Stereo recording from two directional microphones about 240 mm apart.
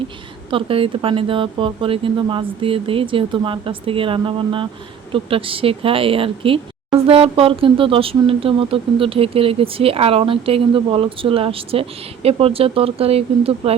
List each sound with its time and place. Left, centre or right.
0.5 s speech: right